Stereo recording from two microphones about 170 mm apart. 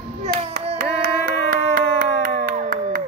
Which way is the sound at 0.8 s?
60° right (ahead or behind).